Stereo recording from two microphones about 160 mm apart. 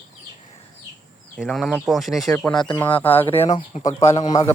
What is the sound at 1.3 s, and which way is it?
Speech, centre (ahead or behind).